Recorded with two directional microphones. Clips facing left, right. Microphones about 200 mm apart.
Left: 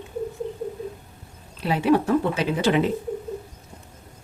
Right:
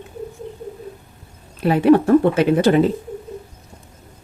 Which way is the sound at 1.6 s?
55° right (ahead or behind).